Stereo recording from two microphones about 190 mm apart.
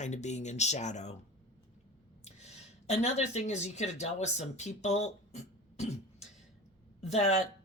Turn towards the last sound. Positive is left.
turn(degrees=35)  # may be behind; listen again after turning